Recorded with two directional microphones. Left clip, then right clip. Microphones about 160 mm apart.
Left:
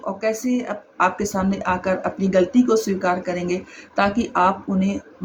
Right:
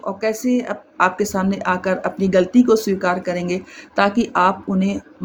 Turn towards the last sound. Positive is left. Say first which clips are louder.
# right 2 dB
turn(degrees=-50)  # may be behind; listen again after turning